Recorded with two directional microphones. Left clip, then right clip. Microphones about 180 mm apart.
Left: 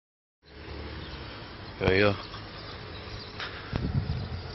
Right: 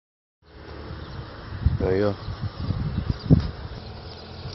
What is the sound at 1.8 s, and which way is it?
Speech, centre (ahead or behind).